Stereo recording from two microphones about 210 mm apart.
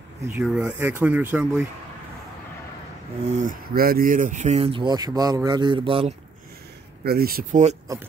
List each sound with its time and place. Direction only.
0.3 s speech: 5° right (ahead or behind)
3.3 s speech: 35° right (ahead or behind)
7.1 s speech: 45° right (ahead or behind)